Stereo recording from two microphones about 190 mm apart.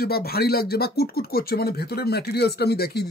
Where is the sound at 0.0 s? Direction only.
55° left (ahead or behind).